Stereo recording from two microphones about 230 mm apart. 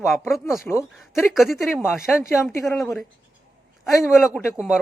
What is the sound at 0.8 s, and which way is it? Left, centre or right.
Speech, centre.